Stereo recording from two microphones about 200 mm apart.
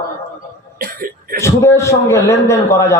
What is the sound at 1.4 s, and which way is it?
A man's voice, 15° left (ahead or behind).